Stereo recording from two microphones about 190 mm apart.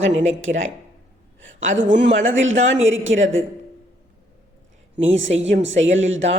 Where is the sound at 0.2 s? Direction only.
35° right (ahead or behind).